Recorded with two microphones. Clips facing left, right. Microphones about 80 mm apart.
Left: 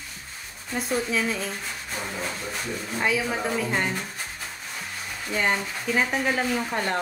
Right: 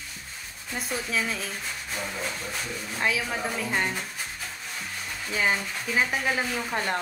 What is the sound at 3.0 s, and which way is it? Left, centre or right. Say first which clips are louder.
Speech: left 2 dB; centre.